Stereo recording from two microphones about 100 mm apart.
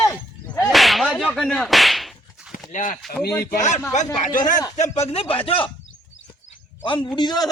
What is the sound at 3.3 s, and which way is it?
Speech, 25° left (ahead or behind).